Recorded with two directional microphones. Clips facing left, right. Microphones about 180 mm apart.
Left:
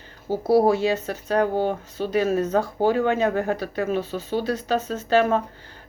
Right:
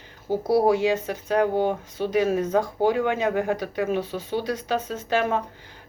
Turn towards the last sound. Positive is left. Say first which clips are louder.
# left 4 dB
turn(degrees=-15)  # may be behind; listen again after turning